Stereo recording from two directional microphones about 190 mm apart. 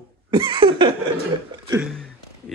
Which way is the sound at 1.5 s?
25° right (ahead or behind).